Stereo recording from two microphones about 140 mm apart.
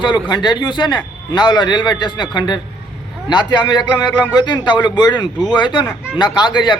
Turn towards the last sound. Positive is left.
turn(degrees=35)  # may be behind; listen again after turning